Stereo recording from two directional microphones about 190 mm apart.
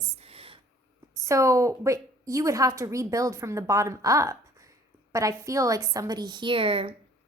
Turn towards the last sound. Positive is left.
turn(degrees=-30)  # may be behind; listen again after turning